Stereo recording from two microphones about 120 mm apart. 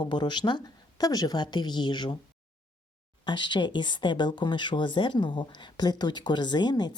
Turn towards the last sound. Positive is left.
turn(degrees=35)  # may be behind; listen again after turning